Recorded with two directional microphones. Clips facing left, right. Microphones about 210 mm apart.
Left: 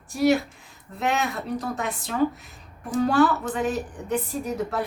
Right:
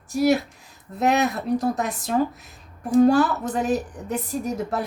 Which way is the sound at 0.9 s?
40° right (ahead or behind).